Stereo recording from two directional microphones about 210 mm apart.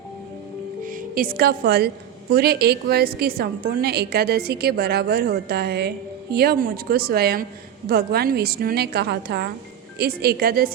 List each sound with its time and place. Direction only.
0.9 s a woman's voice: 40° right (ahead or behind)